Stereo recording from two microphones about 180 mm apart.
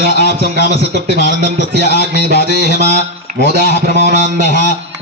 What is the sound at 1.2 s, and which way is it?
A man's voice, 70° left (ahead or behind).